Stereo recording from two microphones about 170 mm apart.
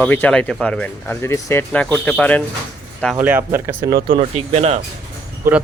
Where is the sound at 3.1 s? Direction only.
10° right (ahead or behind).